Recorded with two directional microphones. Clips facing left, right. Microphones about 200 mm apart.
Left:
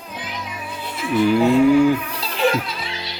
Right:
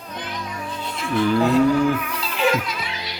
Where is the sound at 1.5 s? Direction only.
10° left (ahead or behind).